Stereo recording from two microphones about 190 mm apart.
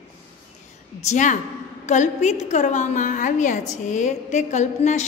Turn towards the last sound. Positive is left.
turn(degrees=40)  # may be behind; listen again after turning